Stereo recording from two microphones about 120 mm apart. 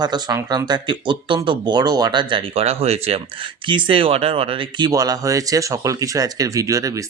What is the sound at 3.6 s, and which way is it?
Speech, 40° right (ahead or behind).